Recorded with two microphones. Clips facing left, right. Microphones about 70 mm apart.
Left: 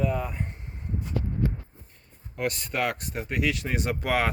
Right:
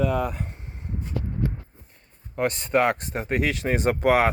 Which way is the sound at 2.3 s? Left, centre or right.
Right.